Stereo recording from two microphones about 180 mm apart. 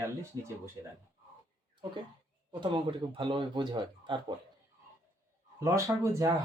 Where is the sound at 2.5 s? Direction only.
25° right (ahead or behind).